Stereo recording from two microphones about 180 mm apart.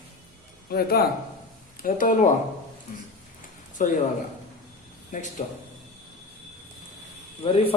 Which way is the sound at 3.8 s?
45° left (ahead or behind).